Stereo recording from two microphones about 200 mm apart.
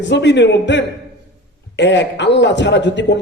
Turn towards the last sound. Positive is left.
turn(degrees=60)  # may be behind; listen again after turning